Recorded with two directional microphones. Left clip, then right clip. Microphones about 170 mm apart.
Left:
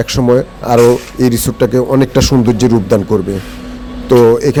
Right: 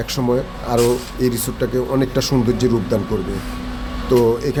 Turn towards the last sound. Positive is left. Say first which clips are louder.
# left 8 dB
turn(degrees=40)  # may be behind; listen again after turning